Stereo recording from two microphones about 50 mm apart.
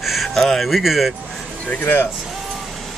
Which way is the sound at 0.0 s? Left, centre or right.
Centre.